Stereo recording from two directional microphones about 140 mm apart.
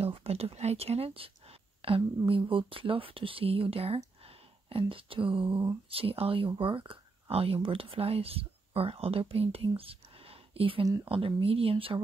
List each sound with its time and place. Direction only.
0.0 s a woman's voice: 45° right (ahead or behind)